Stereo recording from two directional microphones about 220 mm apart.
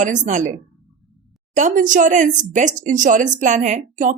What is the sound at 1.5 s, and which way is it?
Speech, 35° right (ahead or behind).